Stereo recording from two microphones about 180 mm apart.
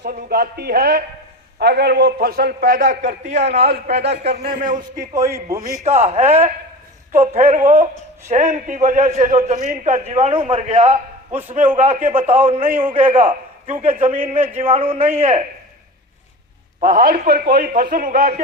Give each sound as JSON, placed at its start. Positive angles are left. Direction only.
{"t": 0.0, "sound": "a man's voice", "side_deg": -60}
{"t": 4.9, "sound": "a man's voice", "side_deg": -15}
{"t": 5.8, "sound": "a man's voice", "side_deg": -35}
{"t": 12.6, "sound": "a man's voice", "side_deg": -10}
{"t": 12.9, "sound": "a man's voice", "side_deg": -30}
{"t": 14.4, "sound": "a man's voice", "side_deg": -10}
{"t": 14.7, "sound": "a man's voice", "side_deg": -30}
{"t": 16.8, "sound": "a man's voice", "side_deg": -55}